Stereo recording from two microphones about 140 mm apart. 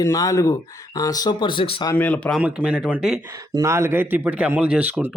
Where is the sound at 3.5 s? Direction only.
20° right (ahead or behind).